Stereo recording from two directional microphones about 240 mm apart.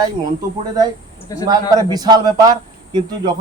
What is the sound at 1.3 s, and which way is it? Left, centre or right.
Speech, centre.